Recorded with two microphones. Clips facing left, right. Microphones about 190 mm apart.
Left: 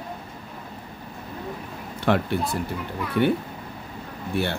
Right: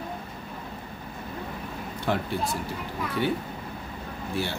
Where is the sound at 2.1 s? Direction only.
65° left (ahead or behind).